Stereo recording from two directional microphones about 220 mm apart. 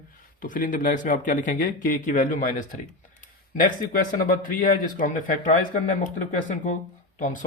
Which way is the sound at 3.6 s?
40° left (ahead or behind).